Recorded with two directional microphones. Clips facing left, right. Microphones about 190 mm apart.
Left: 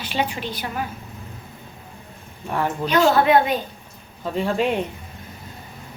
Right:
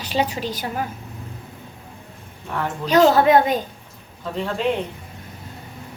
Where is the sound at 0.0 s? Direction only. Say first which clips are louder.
Right 2 dB; 40° right (ahead or behind).